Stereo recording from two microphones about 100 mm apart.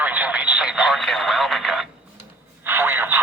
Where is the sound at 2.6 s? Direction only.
20° right (ahead or behind).